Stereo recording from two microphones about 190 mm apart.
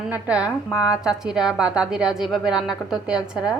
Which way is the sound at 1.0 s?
5° right (ahead or behind).